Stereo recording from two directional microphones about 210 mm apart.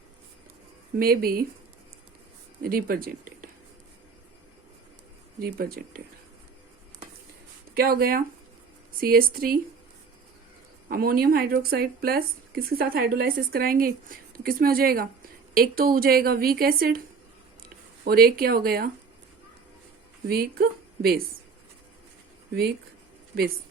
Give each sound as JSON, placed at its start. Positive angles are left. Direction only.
{"t": 0.9, "sound": "speech", "side_deg": -45}
{"t": 2.6, "sound": "speech", "side_deg": -45}
{"t": 5.4, "sound": "speech", "side_deg": -45}
{"t": 7.7, "sound": "speech", "side_deg": -45}
{"t": 10.8, "sound": "speech", "side_deg": -45}
{"t": 18.0, "sound": "speech", "side_deg": -45}
{"t": 20.2, "sound": "speech", "side_deg": -45}